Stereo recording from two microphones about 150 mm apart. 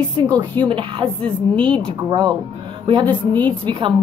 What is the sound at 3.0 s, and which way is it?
Speech, 10° left (ahead or behind).